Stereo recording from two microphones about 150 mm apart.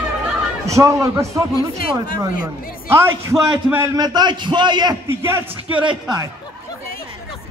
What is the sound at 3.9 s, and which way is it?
A man's voice, 25° right (ahead or behind).